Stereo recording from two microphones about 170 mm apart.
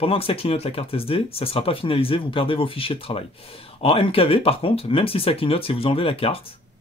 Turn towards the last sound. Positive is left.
turn(degrees=35)  # may be behind; listen again after turning